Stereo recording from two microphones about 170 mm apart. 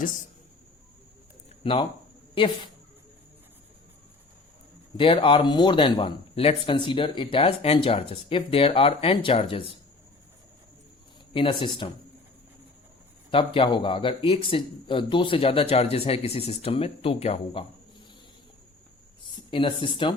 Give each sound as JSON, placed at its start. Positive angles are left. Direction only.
{"t": 1.6, "sound": "speech", "side_deg": 30}
{"t": 4.9, "sound": "speech", "side_deg": 30}
{"t": 11.3, "sound": "speech", "side_deg": 30}
{"t": 13.3, "sound": "speech", "side_deg": 30}
{"t": 19.5, "sound": "speech", "side_deg": 30}